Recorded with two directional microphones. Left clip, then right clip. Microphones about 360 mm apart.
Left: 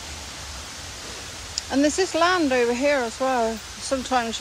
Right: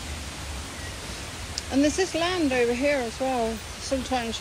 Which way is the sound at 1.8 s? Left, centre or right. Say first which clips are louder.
Left 7 dB; centre.